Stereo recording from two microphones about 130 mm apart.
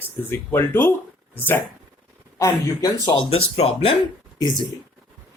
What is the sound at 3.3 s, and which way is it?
Speech, 50° left (ahead or behind).